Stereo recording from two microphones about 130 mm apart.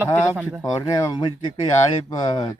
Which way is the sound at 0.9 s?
30° left (ahead or behind).